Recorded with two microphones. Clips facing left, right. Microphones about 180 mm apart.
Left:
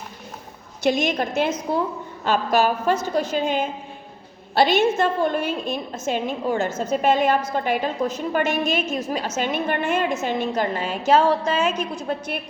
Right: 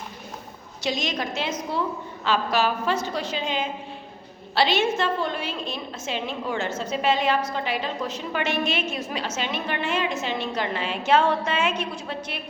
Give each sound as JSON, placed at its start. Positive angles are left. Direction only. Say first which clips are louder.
{"t": 0.8, "sound": "a woman's voice", "louder": "left 7 dB", "side_deg": 55}